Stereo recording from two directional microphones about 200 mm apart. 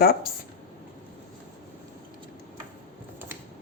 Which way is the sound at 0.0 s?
50° left (ahead or behind).